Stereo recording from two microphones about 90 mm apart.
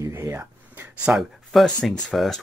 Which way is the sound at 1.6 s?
10° left (ahead or behind).